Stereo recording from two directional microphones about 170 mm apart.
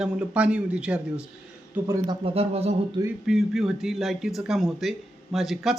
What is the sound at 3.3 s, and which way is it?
Speech, centre (ahead or behind).